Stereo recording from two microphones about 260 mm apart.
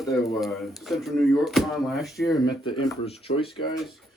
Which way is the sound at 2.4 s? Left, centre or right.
Centre.